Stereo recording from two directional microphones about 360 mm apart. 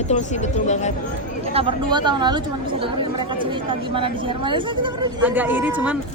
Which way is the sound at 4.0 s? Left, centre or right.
Centre.